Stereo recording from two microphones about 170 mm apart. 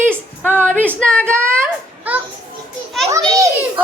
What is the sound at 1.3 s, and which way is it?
Child singing, 15° right (ahead or behind).